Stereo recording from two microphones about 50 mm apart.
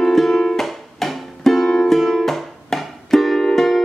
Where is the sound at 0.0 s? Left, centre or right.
Centre.